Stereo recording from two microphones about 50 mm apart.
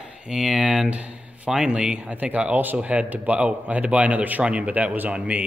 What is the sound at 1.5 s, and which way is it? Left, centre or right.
A man's voice, centre.